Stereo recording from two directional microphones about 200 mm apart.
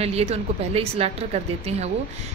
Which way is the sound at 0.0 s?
30° right (ahead or behind).